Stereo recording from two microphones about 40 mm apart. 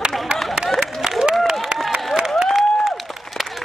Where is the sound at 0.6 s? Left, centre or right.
Centre.